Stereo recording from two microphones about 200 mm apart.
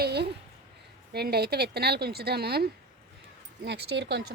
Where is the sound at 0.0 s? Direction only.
55° right (ahead or behind).